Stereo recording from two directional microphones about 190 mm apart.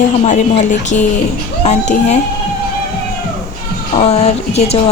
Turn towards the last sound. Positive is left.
turn(degrees=35)  # may be behind; listen again after turning